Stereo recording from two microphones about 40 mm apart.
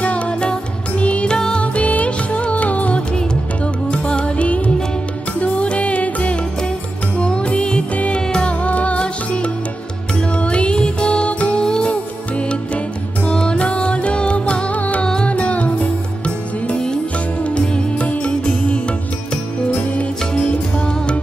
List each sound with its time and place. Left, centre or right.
0.0 s music: left
1.8 s music: left
3.9 s music: left
7.9 s music: left
8.3 s music: left
8.6 s music: left
11.6 s music: left
16.6 s music: left
20.3 s music: left